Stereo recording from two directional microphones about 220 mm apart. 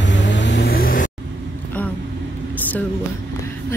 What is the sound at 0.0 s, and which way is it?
Vehicle, 55° left (ahead or behind).